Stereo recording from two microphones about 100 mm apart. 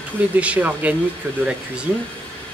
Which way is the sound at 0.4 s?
15° right (ahead or behind).